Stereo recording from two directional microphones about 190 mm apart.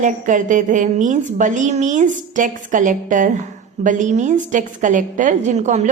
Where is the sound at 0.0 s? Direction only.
40° right (ahead or behind).